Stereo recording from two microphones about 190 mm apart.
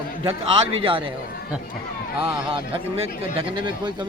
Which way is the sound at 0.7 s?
30° right (ahead or behind).